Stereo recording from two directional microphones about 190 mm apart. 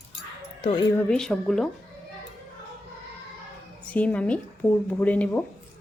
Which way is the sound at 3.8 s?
5° left (ahead or behind).